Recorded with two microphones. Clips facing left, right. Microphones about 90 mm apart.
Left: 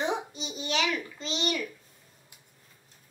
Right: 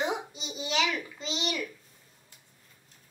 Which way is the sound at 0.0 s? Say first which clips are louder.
Left 1 dB; 5° right (ahead or behind).